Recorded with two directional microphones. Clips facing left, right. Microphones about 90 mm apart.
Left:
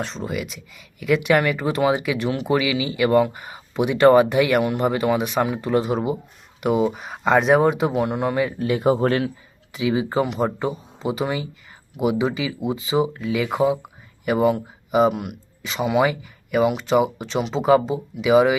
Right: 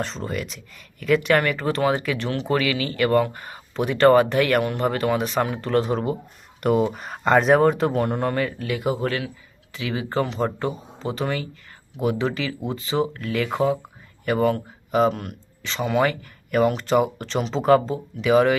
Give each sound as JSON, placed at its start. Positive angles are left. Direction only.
{"t": 0.0, "sound": "speech", "side_deg": 0}
{"t": 8.4, "sound": "speech", "side_deg": 25}
{"t": 9.7, "sound": "speech", "side_deg": 15}